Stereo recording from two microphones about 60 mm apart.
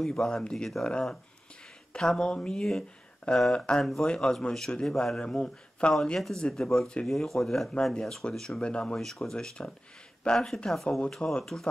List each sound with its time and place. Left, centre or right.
0.0 s speech: centre
2.0 s speech: centre
3.8 s speech: centre
4.1 s speech: centre
5.2 s speech: centre
6.0 s speech: centre